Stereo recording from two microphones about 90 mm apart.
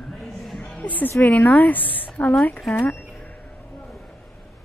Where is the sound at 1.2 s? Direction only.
20° left (ahead or behind).